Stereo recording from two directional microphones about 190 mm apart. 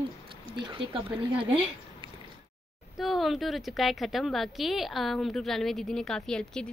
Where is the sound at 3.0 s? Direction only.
Centre (ahead or behind).